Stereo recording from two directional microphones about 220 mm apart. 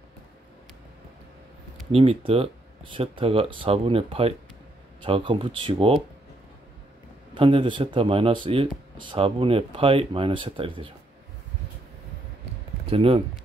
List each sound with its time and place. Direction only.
1.9 s speech: 25° right (ahead or behind)
7.3 s speech: 25° right (ahead or behind)
12.8 s speech: 25° right (ahead or behind)